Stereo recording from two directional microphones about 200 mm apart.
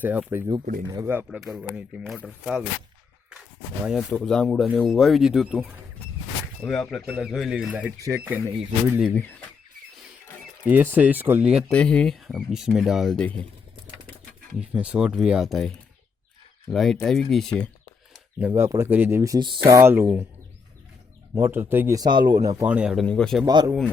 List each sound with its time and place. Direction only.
0.0 s speech: 10° right (ahead or behind)
0.6 s speech: 45° right (ahead or behind)
0.9 s speech: 15° right (ahead or behind)
4.1 s speech: 5° left (ahead or behind)
6.7 s speech: centre (ahead or behind)
9.0 s speech: 10° left (ahead or behind)
10.7 s speech: 10° right (ahead or behind)
11.7 s speech: 5° left (ahead or behind)
14.6 s speech: 5° right (ahead or behind)
18.3 s speech: 10° right (ahead or behind)
21.3 s speech: 10° right (ahead or behind)
23.5 s speech: 20° right (ahead or behind)